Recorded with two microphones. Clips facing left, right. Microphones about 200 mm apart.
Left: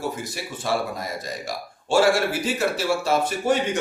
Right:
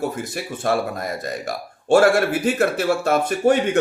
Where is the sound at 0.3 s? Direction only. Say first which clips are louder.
Right 4 dB; 55° right (ahead or behind).